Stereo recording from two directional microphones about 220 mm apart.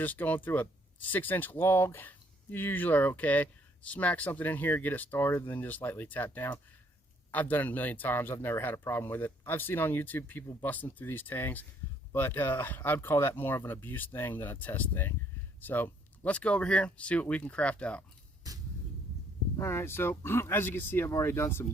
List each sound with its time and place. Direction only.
0.0 s speech: 10° left (ahead or behind)
18.5 s vehicle: 15° right (ahead or behind)
19.5 s speech: 15° left (ahead or behind)